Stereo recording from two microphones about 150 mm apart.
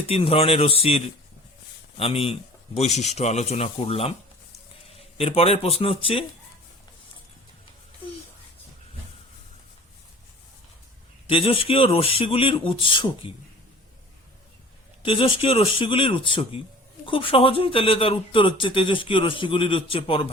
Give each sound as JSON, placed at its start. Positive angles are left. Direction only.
{"t": 0.1, "sound": "a man's voice", "side_deg": 40}
{"t": 11.3, "sound": "a man's voice", "side_deg": 40}
{"t": 15.0, "sound": "a man's voice", "side_deg": 35}